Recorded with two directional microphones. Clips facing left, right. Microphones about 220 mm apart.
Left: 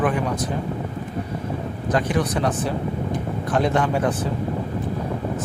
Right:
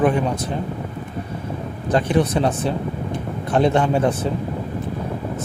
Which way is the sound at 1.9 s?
25° right (ahead or behind).